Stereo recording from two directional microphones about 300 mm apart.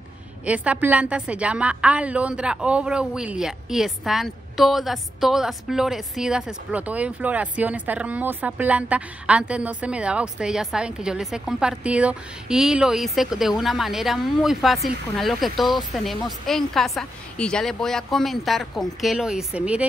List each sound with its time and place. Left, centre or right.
0.5 s a woman's voice: centre